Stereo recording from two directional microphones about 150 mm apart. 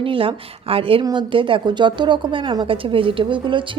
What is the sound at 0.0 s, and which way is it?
A woman's voice, 35° right (ahead or behind).